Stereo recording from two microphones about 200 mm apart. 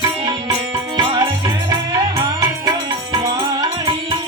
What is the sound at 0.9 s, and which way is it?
Music, 25° right (ahead or behind).